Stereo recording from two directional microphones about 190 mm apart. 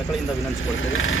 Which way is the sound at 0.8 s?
90° left.